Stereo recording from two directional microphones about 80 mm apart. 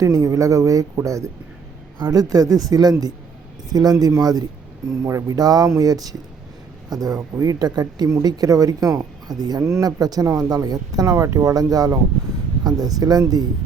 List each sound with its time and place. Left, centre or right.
0.0 s speech: right
2.0 s speech: right
5.0 s speech: right
9.6 s speech: right
11.0 s speech: right